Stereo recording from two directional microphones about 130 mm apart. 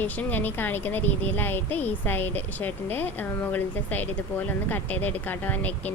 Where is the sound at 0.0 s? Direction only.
15° left (ahead or behind).